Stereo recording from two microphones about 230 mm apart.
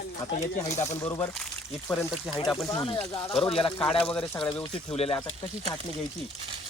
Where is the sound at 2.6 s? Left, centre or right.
Centre.